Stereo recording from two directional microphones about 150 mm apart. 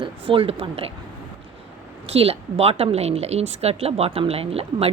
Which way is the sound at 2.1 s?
40° right (ahead or behind).